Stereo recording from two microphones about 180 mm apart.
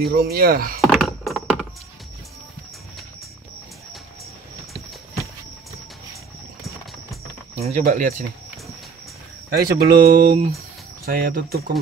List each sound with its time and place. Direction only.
0.0 s speech: 60° right (ahead or behind)
0.7 s a sound: centre (ahead or behind)
7.5 s speech: 35° right (ahead or behind)
7.8 s speech: 45° right (ahead or behind)
9.6 s speech: 55° right (ahead or behind)